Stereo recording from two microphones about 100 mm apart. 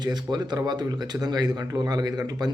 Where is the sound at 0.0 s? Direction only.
45° right (ahead or behind).